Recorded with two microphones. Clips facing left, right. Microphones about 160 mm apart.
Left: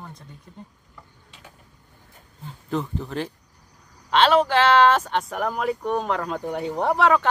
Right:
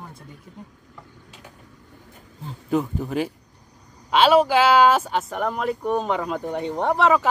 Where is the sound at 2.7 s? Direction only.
10° right (ahead or behind).